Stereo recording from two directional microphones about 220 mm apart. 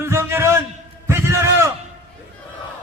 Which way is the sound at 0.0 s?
10° right (ahead or behind).